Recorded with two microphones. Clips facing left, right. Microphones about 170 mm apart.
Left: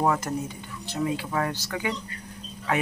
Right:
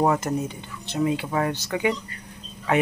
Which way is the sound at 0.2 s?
20° right (ahead or behind).